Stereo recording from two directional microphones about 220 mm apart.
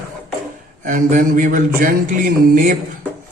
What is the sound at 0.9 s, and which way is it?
Speech, 35° right (ahead or behind).